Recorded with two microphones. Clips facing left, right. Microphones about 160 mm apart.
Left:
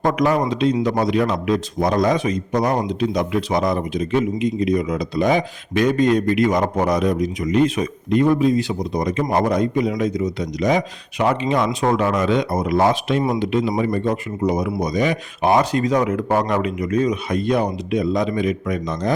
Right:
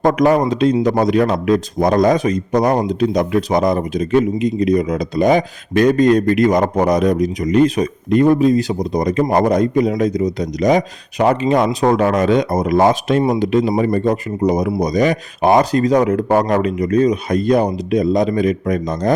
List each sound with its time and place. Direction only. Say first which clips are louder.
0.0 s speech: right 5 dB; 45° right (ahead or behind)